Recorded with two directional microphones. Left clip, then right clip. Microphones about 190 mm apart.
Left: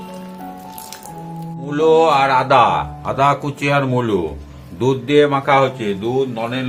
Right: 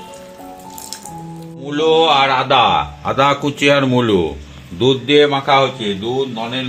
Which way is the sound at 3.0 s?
40° right (ahead or behind).